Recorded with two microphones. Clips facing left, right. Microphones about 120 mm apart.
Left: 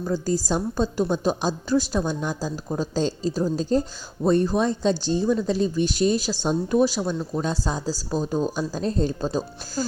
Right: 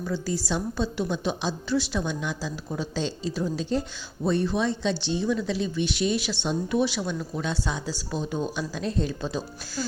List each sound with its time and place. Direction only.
0.0 s speech: 40° left (ahead or behind)